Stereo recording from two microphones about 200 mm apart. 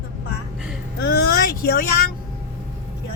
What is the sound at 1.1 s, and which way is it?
Vehicle, 50° left (ahead or behind).